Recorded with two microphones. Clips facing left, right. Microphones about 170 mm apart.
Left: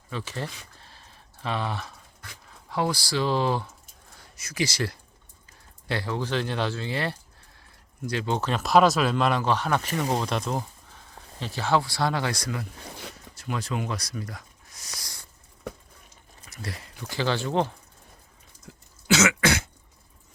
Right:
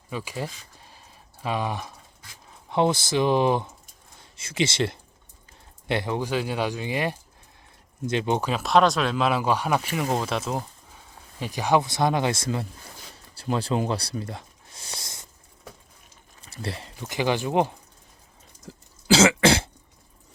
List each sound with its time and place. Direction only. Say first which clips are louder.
0.1 s a sound: right 2 dB; 10° right (ahead or behind)
2.6 s speech: right 5 dB; 20° right (ahead or behind)
8.4 s speech: left 2 dB; 5° right (ahead or behind); by 12.6 s 25° right (ahead or behind)
13.3 s a sound: right 6 dB; 30° right (ahead or behind)
16.4 s speech: right 4 dB; 30° right (ahead or behind)
18.7 s cough: right 3 dB; 30° right (ahead or behind)